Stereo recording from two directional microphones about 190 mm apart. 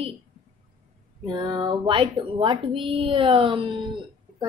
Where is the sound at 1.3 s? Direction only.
25° right (ahead or behind).